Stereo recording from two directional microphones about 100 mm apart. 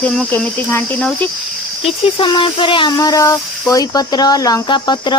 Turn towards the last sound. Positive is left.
turn(degrees=45)  # may be behind; listen again after turning